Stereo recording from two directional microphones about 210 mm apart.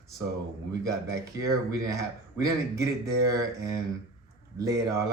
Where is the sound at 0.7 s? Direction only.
15° right (ahead or behind).